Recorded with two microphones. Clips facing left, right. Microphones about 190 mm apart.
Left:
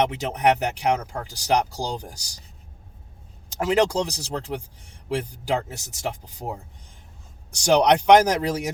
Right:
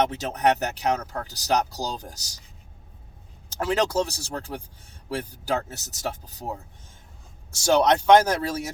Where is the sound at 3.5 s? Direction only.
15° left (ahead or behind).